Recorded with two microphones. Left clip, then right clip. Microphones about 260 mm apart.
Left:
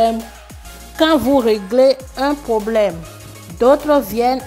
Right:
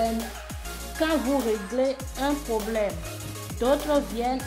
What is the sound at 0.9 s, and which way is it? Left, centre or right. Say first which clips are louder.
Speech: left 11 dB; left.